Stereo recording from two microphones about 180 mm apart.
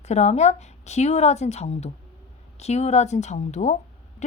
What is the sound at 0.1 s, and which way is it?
A woman's voice, 40° left (ahead or behind).